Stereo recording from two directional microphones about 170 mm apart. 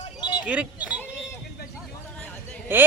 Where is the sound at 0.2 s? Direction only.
25° left (ahead or behind).